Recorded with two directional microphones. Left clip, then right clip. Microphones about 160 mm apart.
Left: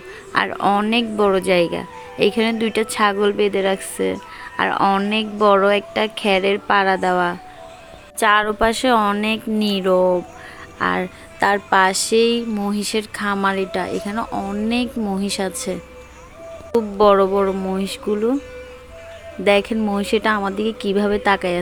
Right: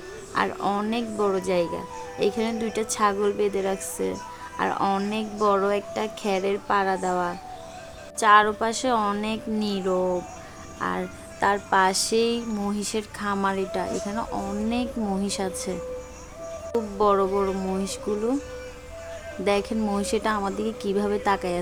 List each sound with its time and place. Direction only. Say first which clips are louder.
0.3 s speech: left 7 dB; 35° left (ahead or behind)
19.5 s speech: left 8 dB; 20° left (ahead or behind)